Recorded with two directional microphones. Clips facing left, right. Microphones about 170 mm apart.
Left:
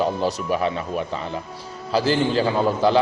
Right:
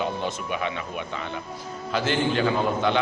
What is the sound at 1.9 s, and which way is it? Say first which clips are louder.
A man's voice: left 4 dB; 35° left (ahead or behind).